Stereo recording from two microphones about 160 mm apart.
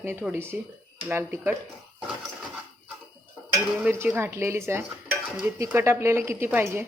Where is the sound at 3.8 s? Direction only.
10° right (ahead or behind).